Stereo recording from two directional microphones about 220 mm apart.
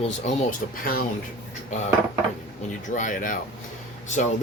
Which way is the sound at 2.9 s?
35° left (ahead or behind).